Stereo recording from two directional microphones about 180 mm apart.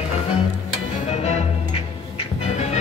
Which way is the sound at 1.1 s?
40° left (ahead or behind).